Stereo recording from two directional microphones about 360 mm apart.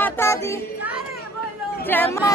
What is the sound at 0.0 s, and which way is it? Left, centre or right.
Child singing, centre.